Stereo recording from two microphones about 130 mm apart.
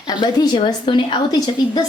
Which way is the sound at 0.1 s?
30° left (ahead or behind).